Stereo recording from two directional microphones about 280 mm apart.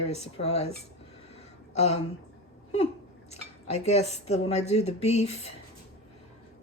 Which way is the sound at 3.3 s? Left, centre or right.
Left.